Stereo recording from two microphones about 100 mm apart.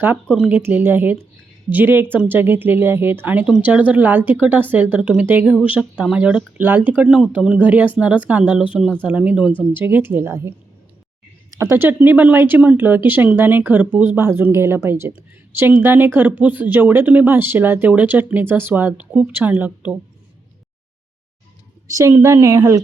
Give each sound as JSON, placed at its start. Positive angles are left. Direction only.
{"t": 0.3, "sound": "speech", "side_deg": -20}
{"t": 11.5, "sound": "speech", "side_deg": -25}
{"t": 21.8, "sound": "a woman's voice", "side_deg": -35}